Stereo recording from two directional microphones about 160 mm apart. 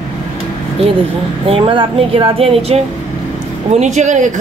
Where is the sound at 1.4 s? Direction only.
35° right (ahead or behind).